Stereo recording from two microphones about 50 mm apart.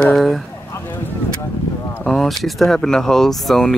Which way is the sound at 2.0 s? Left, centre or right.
Centre.